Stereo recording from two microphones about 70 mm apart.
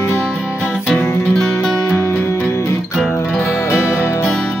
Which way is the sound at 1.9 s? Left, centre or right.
Left.